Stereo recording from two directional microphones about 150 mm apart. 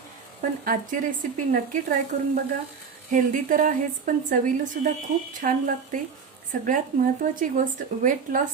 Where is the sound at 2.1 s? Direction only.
55° right (ahead or behind).